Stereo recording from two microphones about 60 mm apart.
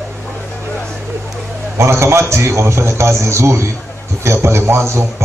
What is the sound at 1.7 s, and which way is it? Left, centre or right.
A man's voice, right.